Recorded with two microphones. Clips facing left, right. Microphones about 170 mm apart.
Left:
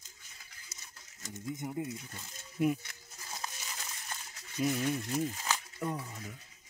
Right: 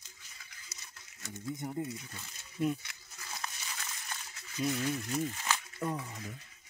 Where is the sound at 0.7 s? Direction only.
45° left (ahead or behind).